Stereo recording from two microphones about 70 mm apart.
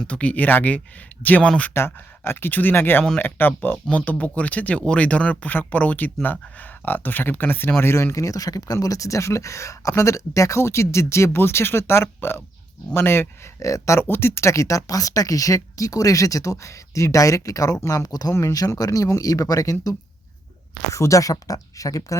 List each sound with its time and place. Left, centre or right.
0.1 s speech: centre
1.7 s speech: left
13.6 s speech: left
14.0 s speech: left
18.9 s speech: left
20.9 s speech: left